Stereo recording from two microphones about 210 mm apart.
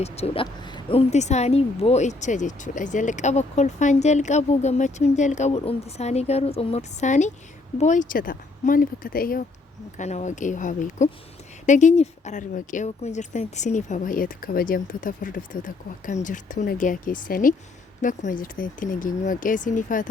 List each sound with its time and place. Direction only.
0.0 s speech: 25° left (ahead or behind)